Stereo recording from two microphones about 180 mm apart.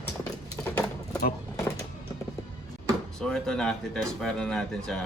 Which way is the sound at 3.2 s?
5° left (ahead or behind).